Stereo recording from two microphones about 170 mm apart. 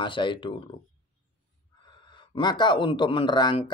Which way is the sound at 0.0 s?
30° left (ahead or behind).